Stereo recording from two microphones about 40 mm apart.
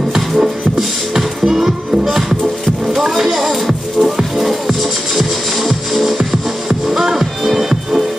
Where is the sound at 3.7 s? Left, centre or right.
Centre.